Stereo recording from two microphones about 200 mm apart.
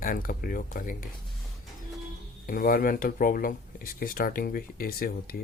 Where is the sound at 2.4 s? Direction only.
45° left (ahead or behind).